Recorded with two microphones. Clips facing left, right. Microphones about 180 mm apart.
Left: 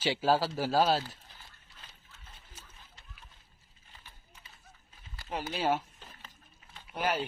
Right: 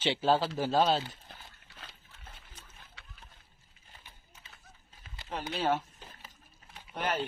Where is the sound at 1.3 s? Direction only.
70° right (ahead or behind).